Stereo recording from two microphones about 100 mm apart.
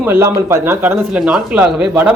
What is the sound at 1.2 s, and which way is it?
Speech, 10° right (ahead or behind).